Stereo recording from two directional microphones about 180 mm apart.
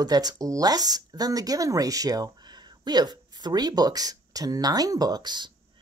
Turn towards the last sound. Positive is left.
turn(degrees=-25)  # may be behind; listen again after turning